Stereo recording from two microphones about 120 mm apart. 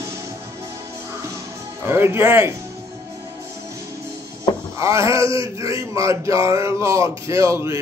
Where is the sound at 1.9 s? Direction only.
20° right (ahead or behind).